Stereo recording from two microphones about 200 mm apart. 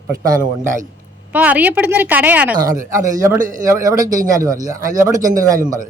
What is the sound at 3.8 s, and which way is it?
Speech, 15° right (ahead or behind).